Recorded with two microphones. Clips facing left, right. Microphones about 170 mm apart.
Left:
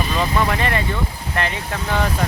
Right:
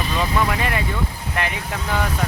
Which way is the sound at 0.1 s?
5° right (ahead or behind).